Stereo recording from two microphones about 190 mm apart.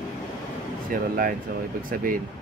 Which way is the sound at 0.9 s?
45° right (ahead or behind).